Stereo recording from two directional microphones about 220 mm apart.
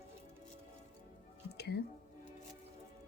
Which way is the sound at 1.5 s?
50° left (ahead or behind).